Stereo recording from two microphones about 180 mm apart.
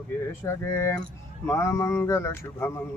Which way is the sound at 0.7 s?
15° left (ahead or behind).